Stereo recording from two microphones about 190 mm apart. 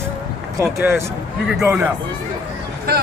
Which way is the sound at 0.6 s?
15° right (ahead or behind).